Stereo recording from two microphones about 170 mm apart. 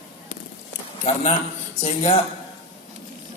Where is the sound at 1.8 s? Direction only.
35° left (ahead or behind).